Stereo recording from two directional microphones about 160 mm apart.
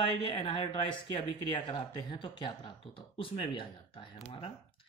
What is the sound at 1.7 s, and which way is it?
Speech, 30° left (ahead or behind).